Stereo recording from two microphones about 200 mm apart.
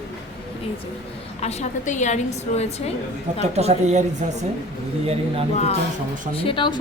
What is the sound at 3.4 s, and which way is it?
Speech, 30° right (ahead or behind).